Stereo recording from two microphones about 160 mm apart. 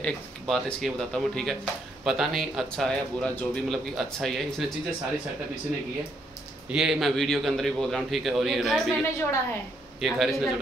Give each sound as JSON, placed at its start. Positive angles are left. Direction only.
{"t": 0.0, "sound": "speech", "side_deg": 5}
{"t": 6.7, "sound": "speech", "side_deg": 0}
{"t": 9.0, "sound": "a woman's voice", "side_deg": 15}
{"t": 9.9, "sound": "speech", "side_deg": 0}